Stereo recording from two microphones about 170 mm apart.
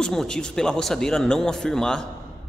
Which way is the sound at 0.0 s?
5° left (ahead or behind).